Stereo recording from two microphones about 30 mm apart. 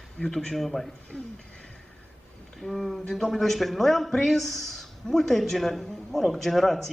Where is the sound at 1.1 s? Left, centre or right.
Centre.